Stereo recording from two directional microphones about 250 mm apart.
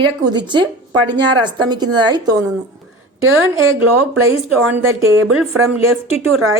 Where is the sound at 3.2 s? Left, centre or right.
Right.